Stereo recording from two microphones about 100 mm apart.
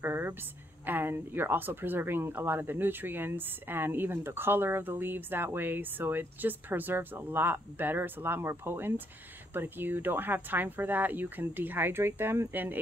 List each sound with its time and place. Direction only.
0.0 s speech: 20° right (ahead or behind)